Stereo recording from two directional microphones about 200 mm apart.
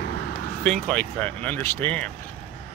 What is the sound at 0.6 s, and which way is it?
Speech, 5° left (ahead or behind).